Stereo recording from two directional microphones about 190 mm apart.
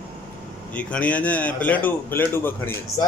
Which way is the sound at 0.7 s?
5° left (ahead or behind).